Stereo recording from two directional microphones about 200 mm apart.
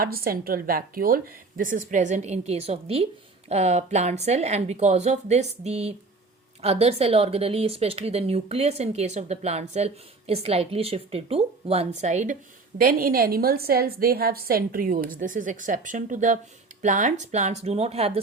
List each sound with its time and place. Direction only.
0.0 s a woman's voice: 50° right (ahead or behind); by 18.2 s 30° right (ahead or behind)